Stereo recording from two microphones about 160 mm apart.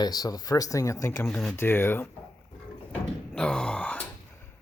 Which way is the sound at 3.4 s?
5° left (ahead or behind).